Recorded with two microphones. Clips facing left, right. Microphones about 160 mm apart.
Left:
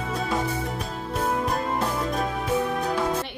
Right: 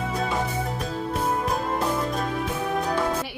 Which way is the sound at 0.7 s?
Centre (ahead or behind).